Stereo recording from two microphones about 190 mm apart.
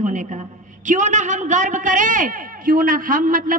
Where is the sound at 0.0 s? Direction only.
40° right (ahead or behind).